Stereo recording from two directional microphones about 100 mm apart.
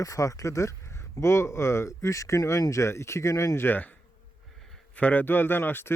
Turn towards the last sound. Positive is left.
turn(degrees=20)  # may be behind; listen again after turning